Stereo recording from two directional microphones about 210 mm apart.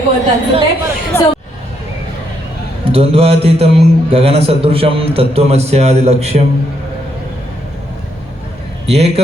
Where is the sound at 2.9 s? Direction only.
25° right (ahead or behind).